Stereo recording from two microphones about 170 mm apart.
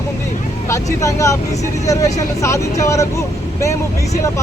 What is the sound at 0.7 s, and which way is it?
Speech, 20° left (ahead or behind).